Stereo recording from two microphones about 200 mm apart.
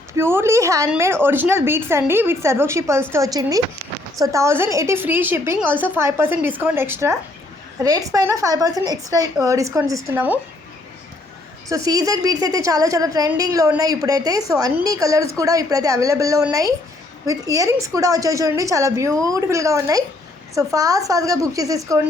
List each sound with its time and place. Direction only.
0.1 s a woman's voice: 10° right (ahead or behind)
11.7 s a woman's voice: 20° right (ahead or behind)